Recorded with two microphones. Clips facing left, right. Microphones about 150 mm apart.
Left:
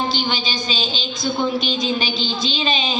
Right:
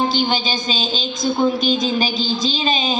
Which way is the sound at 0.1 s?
45° right (ahead or behind).